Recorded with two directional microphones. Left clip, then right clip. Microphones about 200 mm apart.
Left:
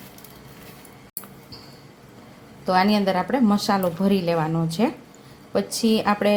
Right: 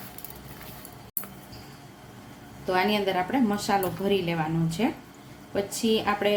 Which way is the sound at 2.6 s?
35° left (ahead or behind).